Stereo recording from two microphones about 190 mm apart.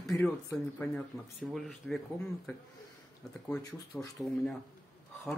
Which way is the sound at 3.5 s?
10° left (ahead or behind).